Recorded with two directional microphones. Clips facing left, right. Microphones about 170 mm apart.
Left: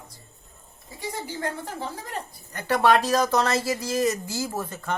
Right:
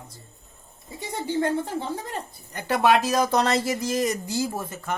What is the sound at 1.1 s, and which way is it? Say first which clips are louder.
Speech: right 7 dB; 25° right (ahead or behind).